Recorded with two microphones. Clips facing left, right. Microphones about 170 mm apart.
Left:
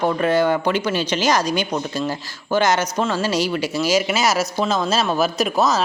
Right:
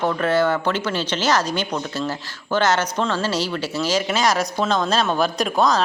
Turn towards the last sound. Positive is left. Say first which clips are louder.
# even
turn(degrees=5)  # may be behind; listen again after turning